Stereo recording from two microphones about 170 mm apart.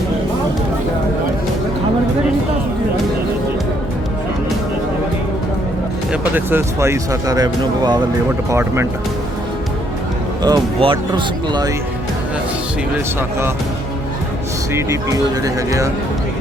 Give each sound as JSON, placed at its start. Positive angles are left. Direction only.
{"t": 6.1, "sound": "speech", "side_deg": -10}
{"t": 10.4, "sound": "speech", "side_deg": -25}
{"t": 14.7, "sound": "speech", "side_deg": -15}